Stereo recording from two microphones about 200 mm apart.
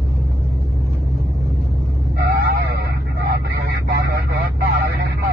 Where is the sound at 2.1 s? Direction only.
55° right (ahead or behind).